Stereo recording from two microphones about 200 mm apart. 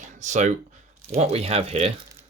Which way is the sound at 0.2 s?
35° right (ahead or behind).